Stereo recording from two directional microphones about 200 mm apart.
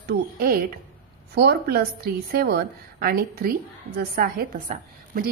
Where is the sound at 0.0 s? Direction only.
50° right (ahead or behind).